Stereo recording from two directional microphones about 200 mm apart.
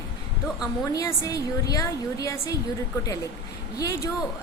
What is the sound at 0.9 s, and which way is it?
A woman's voice, 15° left (ahead or behind).